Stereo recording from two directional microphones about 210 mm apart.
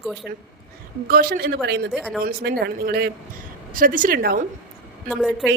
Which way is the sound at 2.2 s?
45° right (ahead or behind).